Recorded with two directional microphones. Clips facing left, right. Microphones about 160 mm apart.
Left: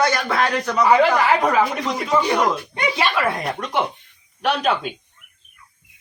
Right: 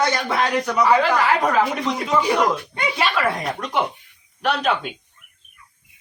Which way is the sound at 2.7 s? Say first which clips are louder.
Left 1 dB; 15° left (ahead or behind).